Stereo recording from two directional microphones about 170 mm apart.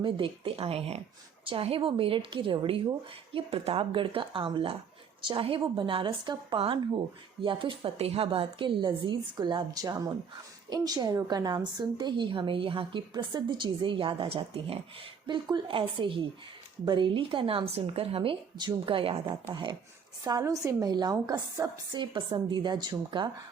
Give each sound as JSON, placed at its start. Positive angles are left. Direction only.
{"t": 0.0, "sound": "a woman's voice", "side_deg": -30}
{"t": 20.2, "sound": "a woman's voice", "side_deg": -20}